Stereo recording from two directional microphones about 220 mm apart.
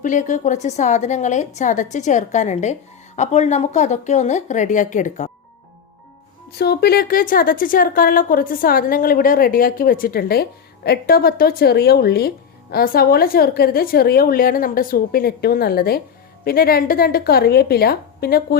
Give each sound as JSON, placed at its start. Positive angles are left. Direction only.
{"t": 0.0, "sound": "a woman's voice", "side_deg": 35}
{"t": 6.5, "sound": "a woman's voice", "side_deg": 45}